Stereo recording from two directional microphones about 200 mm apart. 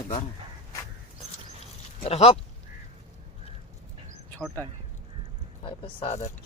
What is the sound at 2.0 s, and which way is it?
Speech, 30° left (ahead or behind).